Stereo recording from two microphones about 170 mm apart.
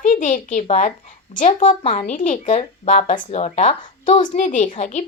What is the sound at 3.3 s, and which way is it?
Speech, 40° left (ahead or behind).